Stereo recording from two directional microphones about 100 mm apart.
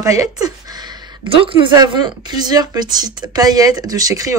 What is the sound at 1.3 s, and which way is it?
Speech, 60° right (ahead or behind).